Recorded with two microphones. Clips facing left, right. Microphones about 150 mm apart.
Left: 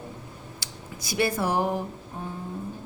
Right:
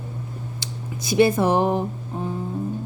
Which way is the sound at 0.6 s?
20° right (ahead or behind).